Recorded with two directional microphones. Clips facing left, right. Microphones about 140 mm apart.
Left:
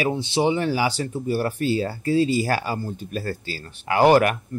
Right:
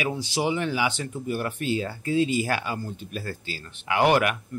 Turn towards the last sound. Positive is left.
turn(degrees=35)  # may be behind; listen again after turning